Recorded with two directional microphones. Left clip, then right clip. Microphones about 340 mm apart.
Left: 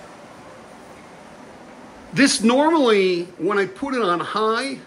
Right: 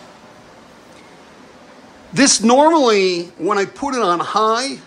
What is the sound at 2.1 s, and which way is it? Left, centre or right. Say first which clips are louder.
Speech: right 4 dB; centre.